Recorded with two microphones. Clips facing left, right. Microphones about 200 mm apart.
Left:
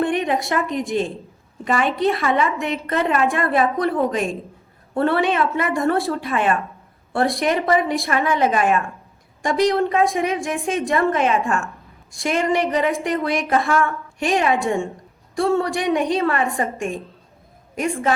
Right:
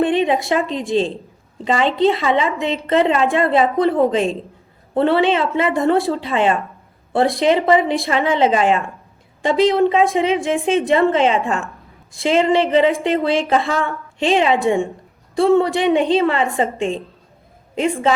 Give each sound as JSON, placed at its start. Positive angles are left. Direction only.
{"t": 0.0, "sound": "a woman's voice", "side_deg": -20}
{"t": 13.5, "sound": "a woman's voice", "side_deg": -20}